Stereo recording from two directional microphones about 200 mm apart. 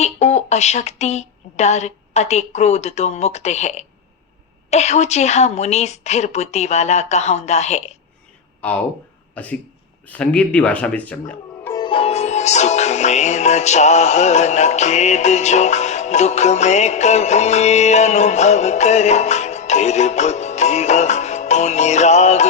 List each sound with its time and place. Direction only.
0.0 s music: 35° left (ahead or behind)
8.6 s speech: 5° left (ahead or behind)
11.8 s music: 25° left (ahead or behind)